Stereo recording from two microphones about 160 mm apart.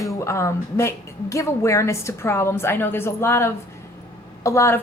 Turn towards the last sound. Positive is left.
turn(degrees=15)  # may be behind; listen again after turning